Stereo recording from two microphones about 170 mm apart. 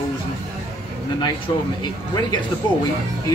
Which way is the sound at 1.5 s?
25° left (ahead or behind).